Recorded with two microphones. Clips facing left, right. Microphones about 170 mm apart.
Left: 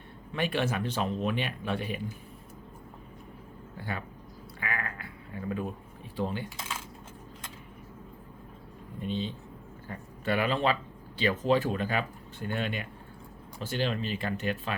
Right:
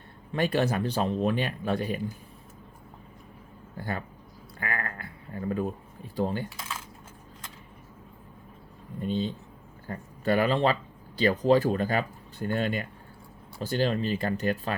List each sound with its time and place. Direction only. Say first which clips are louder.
0.3 s speech: right 4 dB; 40° right (ahead or behind)
3.8 s speech: right 3 dB; 40° right (ahead or behind)
9.0 s speech: right 4 dB; 40° right (ahead or behind)